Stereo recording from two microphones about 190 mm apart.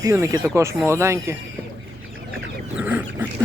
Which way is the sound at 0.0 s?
15° right (ahead or behind).